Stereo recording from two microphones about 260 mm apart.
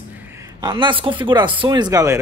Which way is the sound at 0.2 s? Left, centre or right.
Centre.